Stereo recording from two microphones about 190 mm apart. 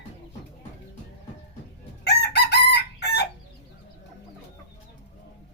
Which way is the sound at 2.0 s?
60° left (ahead or behind).